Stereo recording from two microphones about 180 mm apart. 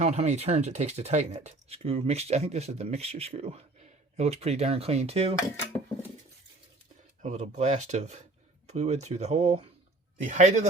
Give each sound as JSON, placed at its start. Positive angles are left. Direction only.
{"t": 0.0, "sound": "speech", "side_deg": -35}
{"t": 7.2, "sound": "speech", "side_deg": -40}